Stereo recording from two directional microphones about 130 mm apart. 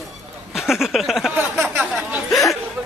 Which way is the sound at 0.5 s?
5° right (ahead or behind).